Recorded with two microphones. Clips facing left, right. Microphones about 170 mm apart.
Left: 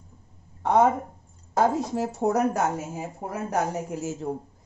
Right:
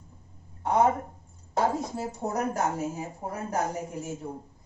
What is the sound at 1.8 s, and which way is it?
A woman's voice, 90° left.